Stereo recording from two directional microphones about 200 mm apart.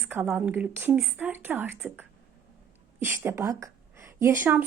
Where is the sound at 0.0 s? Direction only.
5° right (ahead or behind).